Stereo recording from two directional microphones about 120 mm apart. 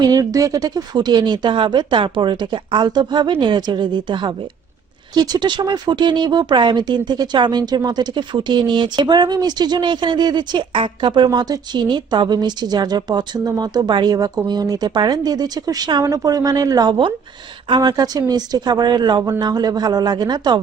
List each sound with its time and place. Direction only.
0.0 s speech: 30° right (ahead or behind)